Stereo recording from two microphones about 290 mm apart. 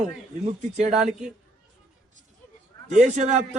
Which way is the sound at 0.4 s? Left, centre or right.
Right.